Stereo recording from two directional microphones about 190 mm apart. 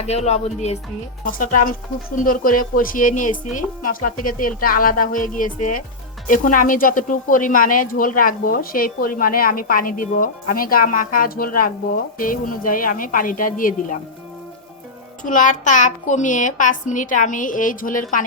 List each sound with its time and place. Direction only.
0.0 s speech: 35° left (ahead or behind)
1.2 s a woman's voice: 45° left (ahead or behind)
15.2 s a woman's voice: 45° left (ahead or behind)